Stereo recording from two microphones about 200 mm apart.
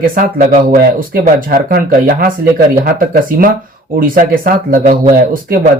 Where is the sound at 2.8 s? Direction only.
45° right (ahead or behind).